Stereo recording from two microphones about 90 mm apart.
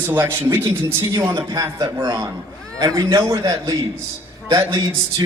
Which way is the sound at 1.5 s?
50° right (ahead or behind).